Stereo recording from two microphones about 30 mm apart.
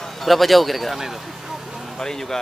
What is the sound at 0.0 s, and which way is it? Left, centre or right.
Speech, centre.